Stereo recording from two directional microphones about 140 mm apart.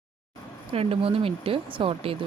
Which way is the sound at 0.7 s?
45° right (ahead or behind).